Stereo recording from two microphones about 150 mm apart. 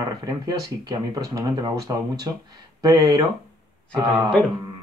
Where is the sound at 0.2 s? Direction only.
25° right (ahead or behind).